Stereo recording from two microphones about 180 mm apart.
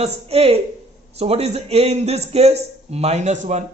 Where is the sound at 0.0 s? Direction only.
35° right (ahead or behind).